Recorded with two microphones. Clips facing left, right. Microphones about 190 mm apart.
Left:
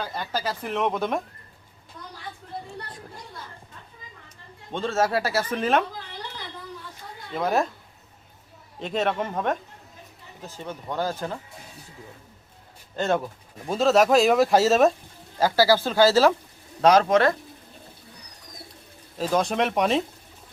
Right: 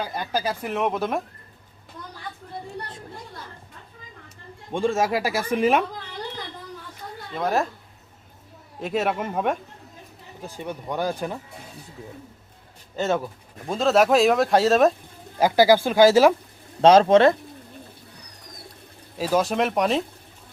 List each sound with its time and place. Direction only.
0.0 s speech: 10° right (ahead or behind)
4.7 s speech: 10° right (ahead or behind)
7.3 s speech: centre (ahead or behind)
8.8 s speech: 5° right (ahead or behind)
13.0 s speech: centre (ahead or behind)
15.4 s speech: 15° right (ahead or behind)
16.8 s speech: 30° right (ahead or behind)
19.2 s speech: 5° right (ahead or behind)